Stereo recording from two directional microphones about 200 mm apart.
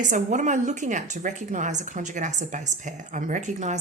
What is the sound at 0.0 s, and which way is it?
A woman's voice, 40° right (ahead or behind).